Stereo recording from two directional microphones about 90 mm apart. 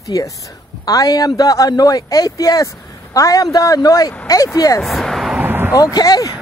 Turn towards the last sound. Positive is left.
turn(degrees=45)  # may be behind; listen again after turning